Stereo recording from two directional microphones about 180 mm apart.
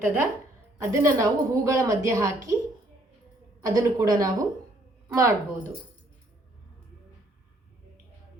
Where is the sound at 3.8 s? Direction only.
20° right (ahead or behind).